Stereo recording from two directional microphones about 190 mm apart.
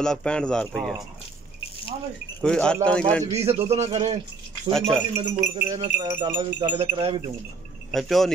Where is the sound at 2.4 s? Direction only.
5° left (ahead or behind).